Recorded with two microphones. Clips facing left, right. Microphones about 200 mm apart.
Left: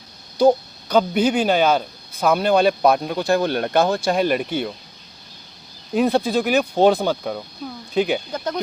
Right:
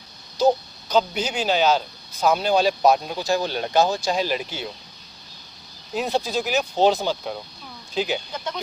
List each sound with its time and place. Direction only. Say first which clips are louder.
0.3 s speech: left 4 dB; 55° left (ahead or behind)
5.9 s speech: left 6 dB; 55° left (ahead or behind)